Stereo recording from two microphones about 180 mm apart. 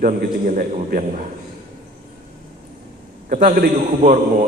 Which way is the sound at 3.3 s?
55° right (ahead or behind).